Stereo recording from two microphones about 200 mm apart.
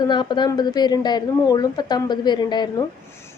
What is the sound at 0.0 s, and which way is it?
A woman's voice, 20° left (ahead or behind).